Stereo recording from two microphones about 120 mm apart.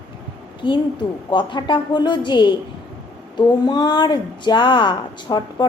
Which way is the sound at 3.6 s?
40° left (ahead or behind).